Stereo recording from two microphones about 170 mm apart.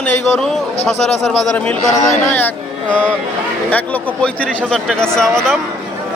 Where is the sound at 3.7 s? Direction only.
10° left (ahead or behind).